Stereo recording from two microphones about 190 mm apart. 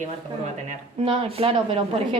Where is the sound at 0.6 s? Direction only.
30° right (ahead or behind).